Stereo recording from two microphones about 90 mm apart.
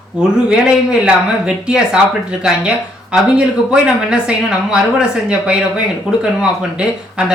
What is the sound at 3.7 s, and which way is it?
Speech, 10° right (ahead or behind).